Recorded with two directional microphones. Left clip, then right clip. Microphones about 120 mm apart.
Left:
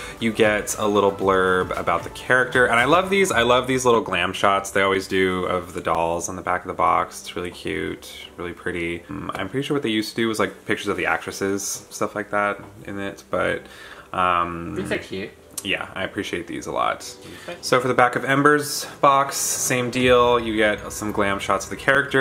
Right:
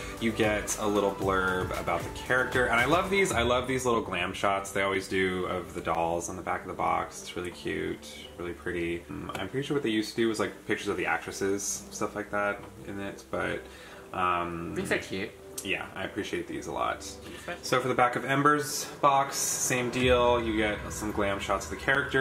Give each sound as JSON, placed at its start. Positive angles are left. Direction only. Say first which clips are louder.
{"t": 0.2, "sound": "speech", "louder": "left 9 dB", "side_deg": 40}
{"t": 15.6, "sound": "speech", "louder": "left 8 dB", "side_deg": 45}